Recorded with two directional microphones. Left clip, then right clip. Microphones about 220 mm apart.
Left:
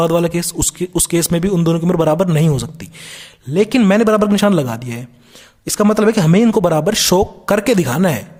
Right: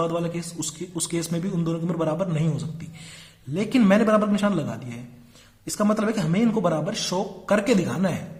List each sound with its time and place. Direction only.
0.0 s a man's voice: 50° left (ahead or behind)